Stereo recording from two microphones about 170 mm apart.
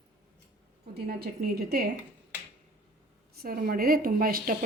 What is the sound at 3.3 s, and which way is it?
A woman's voice, 60° right (ahead or behind).